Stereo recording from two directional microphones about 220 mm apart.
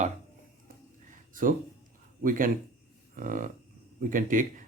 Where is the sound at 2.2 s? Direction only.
40° right (ahead or behind).